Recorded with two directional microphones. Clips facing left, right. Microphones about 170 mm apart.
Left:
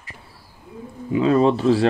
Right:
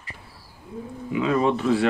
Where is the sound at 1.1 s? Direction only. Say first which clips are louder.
Left 5 dB; 35° left (ahead or behind).